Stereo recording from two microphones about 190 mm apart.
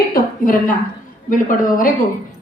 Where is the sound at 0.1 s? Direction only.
45° left (ahead or behind).